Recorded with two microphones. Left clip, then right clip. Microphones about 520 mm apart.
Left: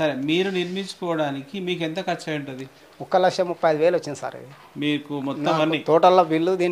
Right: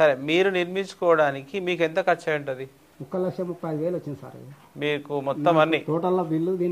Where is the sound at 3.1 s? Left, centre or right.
Left.